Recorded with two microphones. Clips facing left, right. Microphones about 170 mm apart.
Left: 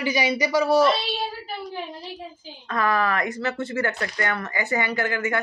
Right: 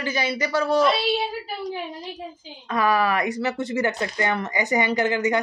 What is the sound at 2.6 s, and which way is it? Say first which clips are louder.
Speech: right 2 dB; 10° right (ahead or behind).